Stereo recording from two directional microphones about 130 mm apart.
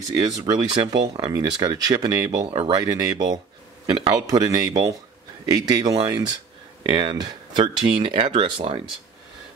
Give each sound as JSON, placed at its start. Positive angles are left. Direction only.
{"t": 0.1, "sound": "speech", "side_deg": -30}